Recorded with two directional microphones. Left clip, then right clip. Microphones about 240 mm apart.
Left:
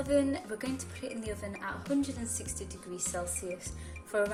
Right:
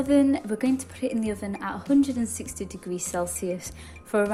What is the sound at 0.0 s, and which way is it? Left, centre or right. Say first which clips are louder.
Speech: right 7 dB; right.